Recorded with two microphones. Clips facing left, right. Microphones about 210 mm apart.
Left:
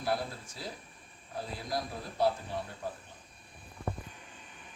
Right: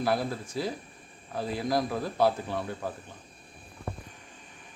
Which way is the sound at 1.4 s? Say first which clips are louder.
Right 8 dB; 85° right.